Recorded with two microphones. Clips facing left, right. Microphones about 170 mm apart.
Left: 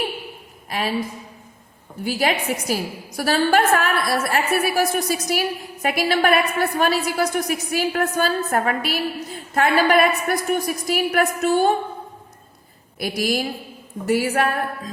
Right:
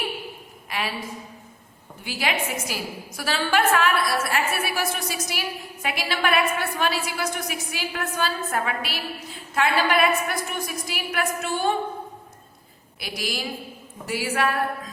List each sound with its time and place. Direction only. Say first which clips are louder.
2.0 s a woman's voice: left 6 dB; 40° left (ahead or behind)
13.0 s a woman's voice: left 8 dB; 45° left (ahead or behind)